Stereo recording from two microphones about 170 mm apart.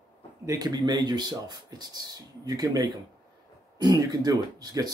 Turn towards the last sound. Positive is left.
turn(degrees=-25)  # may be behind; listen again after turning